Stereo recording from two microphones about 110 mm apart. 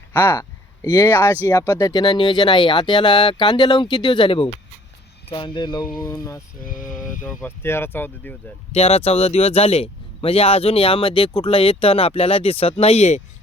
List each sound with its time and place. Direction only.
0.1 s speech: 20° left (ahead or behind)
1.9 s speech: 40° left (ahead or behind)
6.0 s speech: 30° left (ahead or behind)
8.7 s speech: 65° left (ahead or behind); by 13.2 s 85° left